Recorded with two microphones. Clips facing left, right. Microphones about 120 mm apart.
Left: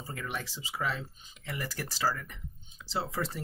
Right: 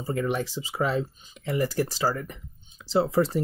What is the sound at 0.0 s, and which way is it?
Speech, 30° right (ahead or behind).